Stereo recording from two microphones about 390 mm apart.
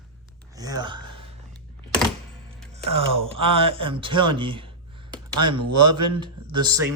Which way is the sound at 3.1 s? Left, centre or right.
Centre.